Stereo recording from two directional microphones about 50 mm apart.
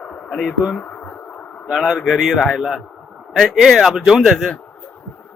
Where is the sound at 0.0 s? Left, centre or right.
Left.